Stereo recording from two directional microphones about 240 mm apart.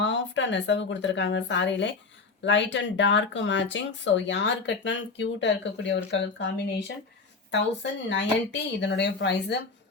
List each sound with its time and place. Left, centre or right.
0.0 s speech: left